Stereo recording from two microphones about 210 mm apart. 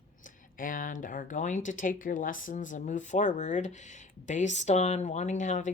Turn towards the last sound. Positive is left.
turn(degrees=35)  # may be behind; listen again after turning